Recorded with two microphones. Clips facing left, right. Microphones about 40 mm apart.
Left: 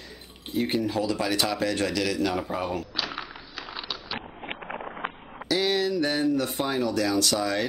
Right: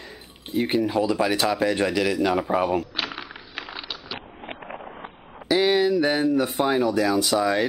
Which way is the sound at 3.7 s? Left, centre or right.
Centre.